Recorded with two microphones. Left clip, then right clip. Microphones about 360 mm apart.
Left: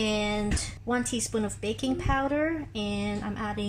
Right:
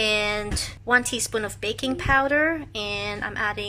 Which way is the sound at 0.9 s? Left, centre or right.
Right.